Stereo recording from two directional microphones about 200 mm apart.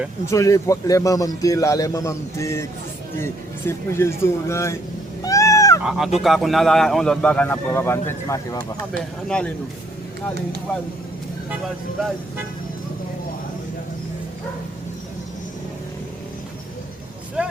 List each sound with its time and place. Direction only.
0.3 s a man's voice: 15° left (ahead or behind)
5.2 s cat: 15° left (ahead or behind)
5.8 s a man's voice: centre (ahead or behind); by 8.6 s 15° left (ahead or behind)
8.9 s a man's voice: 5° left (ahead or behind)
17.4 s vehicle: 5° right (ahead or behind)